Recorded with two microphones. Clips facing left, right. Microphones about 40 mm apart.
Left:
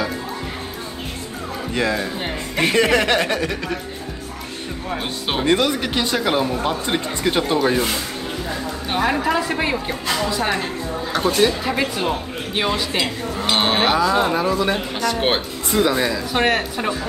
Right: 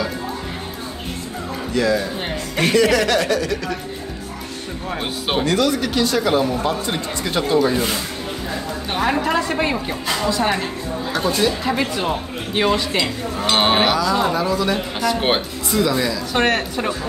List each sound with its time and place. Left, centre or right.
1.7 s speech: left
4.8 s speech: centre
5.4 s speech: left
8.8 s a woman's voice: centre
11.6 s speech: centre
13.4 s cattle: centre
13.9 s speech: left
15.0 s speech: centre
15.7 s speech: left
16.3 s speech: centre